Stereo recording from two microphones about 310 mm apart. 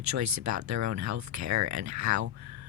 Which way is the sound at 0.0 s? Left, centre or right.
Right.